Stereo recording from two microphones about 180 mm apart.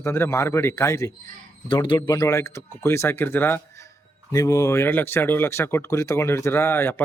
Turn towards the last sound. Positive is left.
turn(degrees=10)  # may be behind; listen again after turning